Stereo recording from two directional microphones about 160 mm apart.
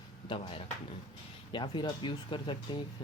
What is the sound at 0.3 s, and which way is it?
Speech, 35° left (ahead or behind).